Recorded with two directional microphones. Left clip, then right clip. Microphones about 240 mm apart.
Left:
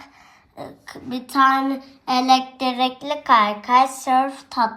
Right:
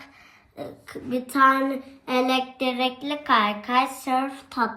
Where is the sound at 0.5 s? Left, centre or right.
Left.